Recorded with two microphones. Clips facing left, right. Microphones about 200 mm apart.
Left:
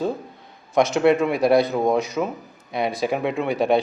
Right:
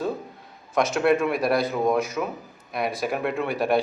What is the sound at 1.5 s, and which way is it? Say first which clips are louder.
Speech: left 6 dB; 20° left (ahead or behind).